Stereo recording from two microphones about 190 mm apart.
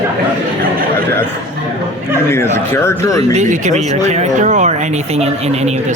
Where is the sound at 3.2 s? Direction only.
35° right (ahead or behind).